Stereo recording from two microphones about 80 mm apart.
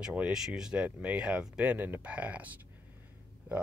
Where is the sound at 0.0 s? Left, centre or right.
Centre.